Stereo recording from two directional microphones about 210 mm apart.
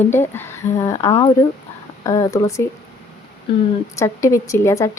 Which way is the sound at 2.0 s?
15° left (ahead or behind).